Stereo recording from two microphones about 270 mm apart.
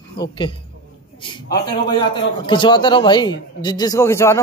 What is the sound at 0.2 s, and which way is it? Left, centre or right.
A woman's voice, centre.